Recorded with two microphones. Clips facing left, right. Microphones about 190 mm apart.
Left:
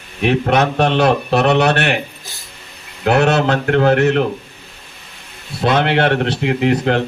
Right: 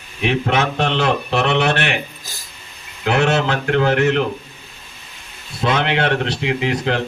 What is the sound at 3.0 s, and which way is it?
Speech, 50° left (ahead or behind).